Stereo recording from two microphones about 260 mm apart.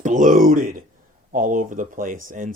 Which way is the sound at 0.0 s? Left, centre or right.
Right.